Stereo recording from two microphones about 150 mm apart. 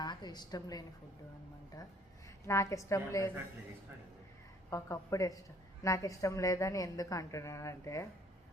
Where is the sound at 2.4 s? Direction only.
20° left (ahead or behind).